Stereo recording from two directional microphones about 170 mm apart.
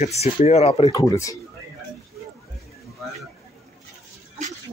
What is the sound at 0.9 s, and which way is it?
Speech, 20° left (ahead or behind).